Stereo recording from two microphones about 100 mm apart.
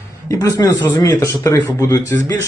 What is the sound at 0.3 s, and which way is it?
Speech, 35° left (ahead or behind).